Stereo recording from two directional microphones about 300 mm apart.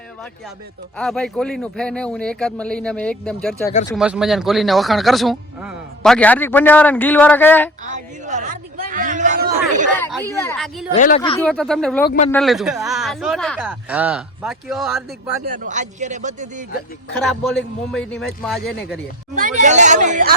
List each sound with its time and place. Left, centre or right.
0.9 s speech: centre
7.9 s a man's voice: right
10.3 s speech: centre
10.9 s speech: left; by 15.4 s centre
15.4 s a man's voice: right
17.4 s speech: centre
18.6 s speech: left
19.4 s speech: right
19.6 s a man's voice: right